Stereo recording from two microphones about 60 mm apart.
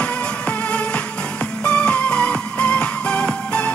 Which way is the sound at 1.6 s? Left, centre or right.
Centre.